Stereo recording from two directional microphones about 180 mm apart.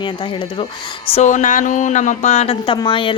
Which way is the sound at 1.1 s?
40° left (ahead or behind).